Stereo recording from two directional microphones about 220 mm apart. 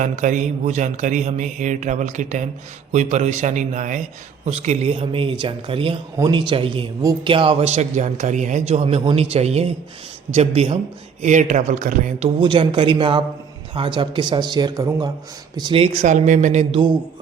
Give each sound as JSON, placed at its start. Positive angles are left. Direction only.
{"t": 0.0, "sound": "speech", "side_deg": -35}
{"t": 12.4, "sound": "speech", "side_deg": -20}